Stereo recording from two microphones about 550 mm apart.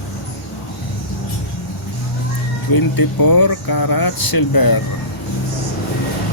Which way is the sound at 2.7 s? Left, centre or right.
Left.